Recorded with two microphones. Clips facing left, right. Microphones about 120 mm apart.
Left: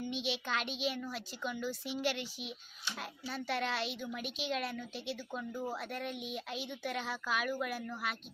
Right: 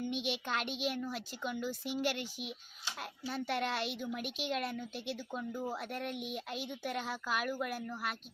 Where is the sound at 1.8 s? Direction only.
50° right (ahead or behind).